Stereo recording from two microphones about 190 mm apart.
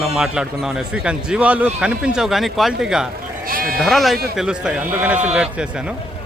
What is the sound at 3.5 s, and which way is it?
Speech, 50° right (ahead or behind).